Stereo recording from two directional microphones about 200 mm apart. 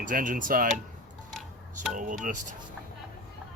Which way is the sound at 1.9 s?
40° right (ahead or behind).